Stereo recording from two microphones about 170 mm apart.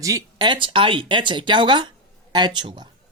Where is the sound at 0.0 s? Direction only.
20° right (ahead or behind).